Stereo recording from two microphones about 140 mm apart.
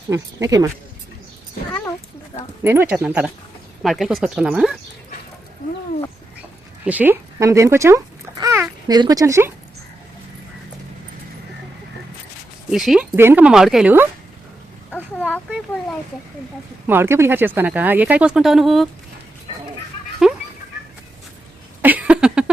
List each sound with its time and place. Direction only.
0.1 s speech: 25° right (ahead or behind)
2.6 s speech: 15° right (ahead or behind)
6.8 s babbling: 10° right (ahead or behind)
8.9 s speech: 30° right (ahead or behind)
12.7 s speech: 5° right (ahead or behind)
13.1 s speech: 15° right (ahead or behind)
14.9 s speech: 10° left (ahead or behind)
16.8 s speech: 15° right (ahead or behind)
20.2 s fowl: 5° right (ahead or behind)
21.8 s a sound: 10° right (ahead or behind)